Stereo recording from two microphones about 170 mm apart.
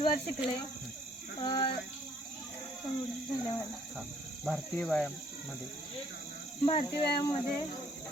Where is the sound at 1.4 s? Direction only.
25° left (ahead or behind).